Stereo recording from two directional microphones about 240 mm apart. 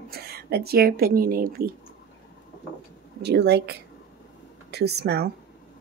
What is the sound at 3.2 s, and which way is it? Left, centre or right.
Speech, right.